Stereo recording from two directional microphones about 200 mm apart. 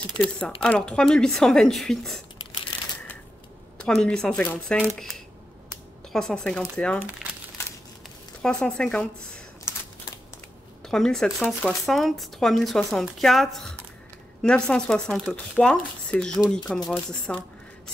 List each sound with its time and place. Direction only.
0.2 s speech: 25° right (ahead or behind)
0.6 s speech: 5° left (ahead or behind)
3.8 s speech: 5° left (ahead or behind)
8.4 s speech: 5° left (ahead or behind)
10.9 s speech: centre (ahead or behind)